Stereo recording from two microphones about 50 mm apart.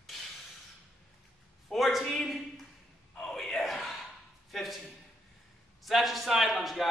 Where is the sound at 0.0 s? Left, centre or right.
Centre.